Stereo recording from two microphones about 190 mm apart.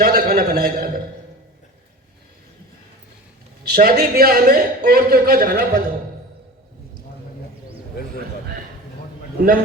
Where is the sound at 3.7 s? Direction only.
50° right (ahead or behind).